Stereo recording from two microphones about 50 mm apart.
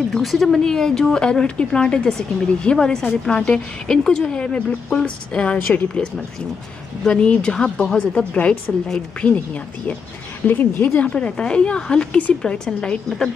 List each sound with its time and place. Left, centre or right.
0.2 s speech: centre
0.7 s a woman's voice: centre
5.7 s a woman's voice: centre
8.3 s a woman's voice: left